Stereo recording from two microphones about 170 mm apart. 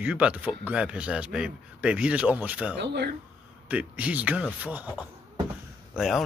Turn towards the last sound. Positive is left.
turn(degrees=0)  # may be behind; listen again after turning